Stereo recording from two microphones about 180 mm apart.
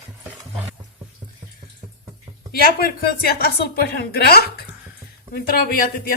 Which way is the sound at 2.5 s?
55° left (ahead or behind).